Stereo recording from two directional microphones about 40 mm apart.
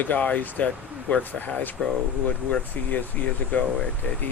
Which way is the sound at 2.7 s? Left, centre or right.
Left.